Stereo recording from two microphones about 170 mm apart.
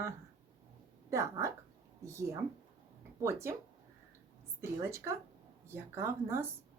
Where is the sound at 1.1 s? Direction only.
15° right (ahead or behind).